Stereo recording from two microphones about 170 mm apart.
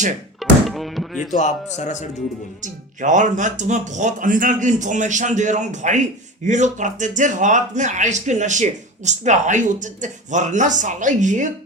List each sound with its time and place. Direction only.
0.3 s music: centre (ahead or behind)
1.3 s a man's voice: 45° left (ahead or behind)
2.6 s speech: 45° right (ahead or behind)